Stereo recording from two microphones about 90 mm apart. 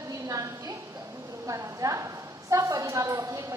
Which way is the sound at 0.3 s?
40° right (ahead or behind).